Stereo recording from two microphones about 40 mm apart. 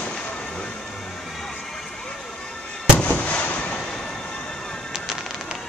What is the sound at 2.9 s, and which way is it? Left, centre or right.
Fireworks, left.